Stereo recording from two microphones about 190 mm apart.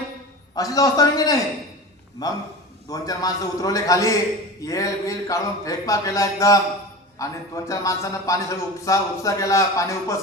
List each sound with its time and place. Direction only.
0.5 s a man's voice: 20° left (ahead or behind)